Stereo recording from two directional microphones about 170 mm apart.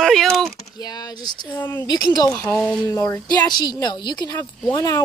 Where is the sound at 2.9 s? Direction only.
20° left (ahead or behind).